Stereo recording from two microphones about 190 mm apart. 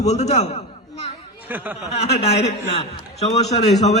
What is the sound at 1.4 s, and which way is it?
Speech, 10° right (ahead or behind).